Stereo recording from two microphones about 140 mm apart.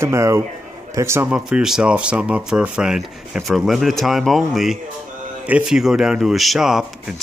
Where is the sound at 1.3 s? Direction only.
5° right (ahead or behind).